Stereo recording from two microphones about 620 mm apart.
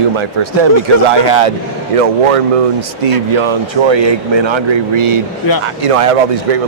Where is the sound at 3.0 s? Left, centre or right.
Right.